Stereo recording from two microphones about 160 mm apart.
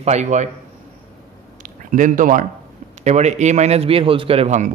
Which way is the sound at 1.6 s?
55° right (ahead or behind).